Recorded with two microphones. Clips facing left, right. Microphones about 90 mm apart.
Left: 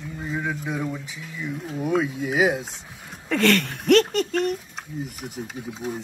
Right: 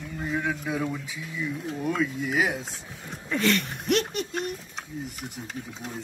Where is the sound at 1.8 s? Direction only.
20° left (ahead or behind).